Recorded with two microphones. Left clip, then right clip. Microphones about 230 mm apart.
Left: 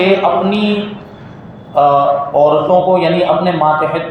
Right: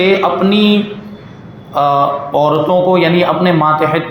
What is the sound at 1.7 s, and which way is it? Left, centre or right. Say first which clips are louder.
A man's voice: left 2 dB; right.